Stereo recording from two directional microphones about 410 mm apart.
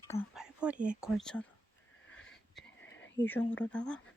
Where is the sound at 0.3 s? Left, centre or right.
Centre.